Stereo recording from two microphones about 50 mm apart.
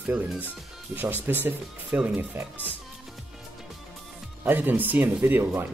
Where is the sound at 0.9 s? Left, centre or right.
Right.